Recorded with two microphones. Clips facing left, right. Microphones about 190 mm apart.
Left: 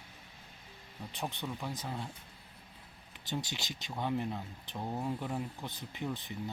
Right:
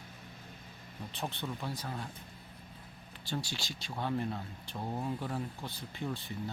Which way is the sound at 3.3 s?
20° left (ahead or behind).